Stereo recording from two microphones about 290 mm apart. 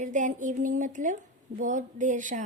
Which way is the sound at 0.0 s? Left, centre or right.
Right.